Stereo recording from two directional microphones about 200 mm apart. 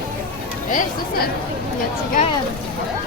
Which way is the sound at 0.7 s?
40° left (ahead or behind).